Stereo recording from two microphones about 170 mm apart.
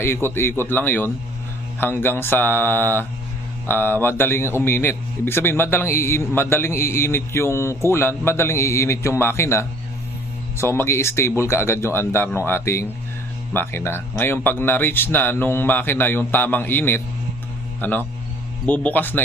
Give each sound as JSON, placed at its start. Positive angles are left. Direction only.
{"t": 0.0, "sound": "a man's voice", "side_deg": 15}